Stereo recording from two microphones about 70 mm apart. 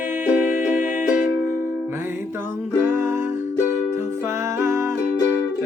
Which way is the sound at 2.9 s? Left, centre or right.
Right.